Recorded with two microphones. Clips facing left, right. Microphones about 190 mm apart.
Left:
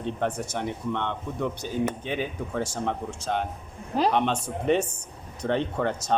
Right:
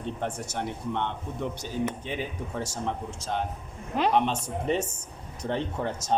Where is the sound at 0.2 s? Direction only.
60° left (ahead or behind).